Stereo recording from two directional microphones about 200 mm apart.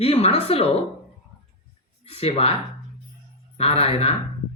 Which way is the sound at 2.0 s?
30° left (ahead or behind).